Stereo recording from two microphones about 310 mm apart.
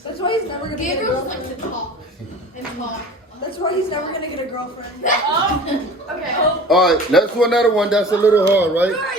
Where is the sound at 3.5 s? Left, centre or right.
Centre.